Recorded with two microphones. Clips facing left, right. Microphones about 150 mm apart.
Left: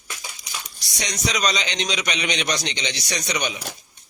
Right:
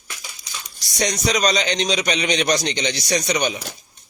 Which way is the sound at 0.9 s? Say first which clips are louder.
Right 6 dB; 45° right (ahead or behind).